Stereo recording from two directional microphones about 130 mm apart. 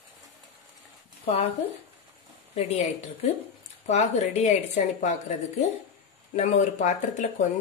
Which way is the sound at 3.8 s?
60° left (ahead or behind).